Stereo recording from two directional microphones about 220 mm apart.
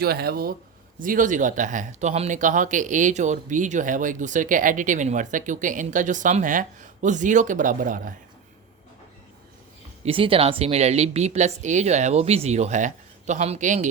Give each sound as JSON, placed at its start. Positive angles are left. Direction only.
{"t": 0.0, "sound": "speech", "side_deg": -45}
{"t": 10.0, "sound": "speech", "side_deg": -25}